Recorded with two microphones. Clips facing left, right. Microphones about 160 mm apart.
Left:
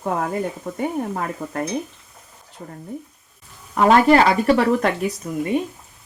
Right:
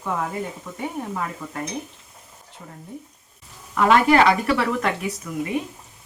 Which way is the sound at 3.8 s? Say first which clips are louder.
Left 3 dB; 35° left (ahead or behind).